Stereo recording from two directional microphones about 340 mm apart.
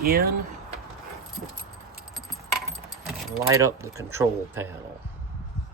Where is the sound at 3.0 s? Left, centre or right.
Centre.